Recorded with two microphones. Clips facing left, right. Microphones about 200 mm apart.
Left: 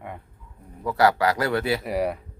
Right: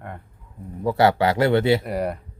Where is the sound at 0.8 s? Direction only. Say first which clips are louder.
Right 2 dB; 25° right (ahead or behind).